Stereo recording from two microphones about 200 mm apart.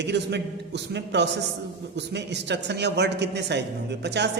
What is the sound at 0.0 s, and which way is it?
A man's voice, 60° right (ahead or behind).